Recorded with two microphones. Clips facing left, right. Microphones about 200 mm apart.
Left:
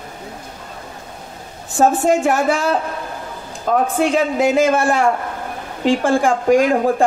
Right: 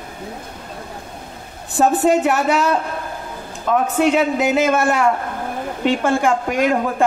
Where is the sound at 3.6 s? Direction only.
40° left (ahead or behind).